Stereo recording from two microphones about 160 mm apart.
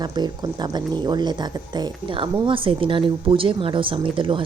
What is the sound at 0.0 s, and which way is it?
Speech, 25° right (ahead or behind).